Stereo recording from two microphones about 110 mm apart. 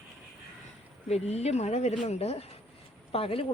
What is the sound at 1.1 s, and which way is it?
Speech, 75° left (ahead or behind).